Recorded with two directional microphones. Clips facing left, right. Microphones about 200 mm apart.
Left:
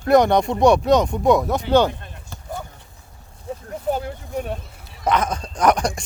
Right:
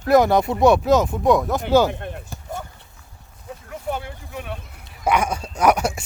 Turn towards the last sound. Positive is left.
turn(degrees=-5)  # may be behind; listen again after turning